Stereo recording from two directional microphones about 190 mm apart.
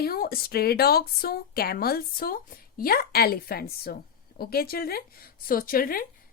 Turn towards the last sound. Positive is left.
turn(degrees=50)  # may be behind; listen again after turning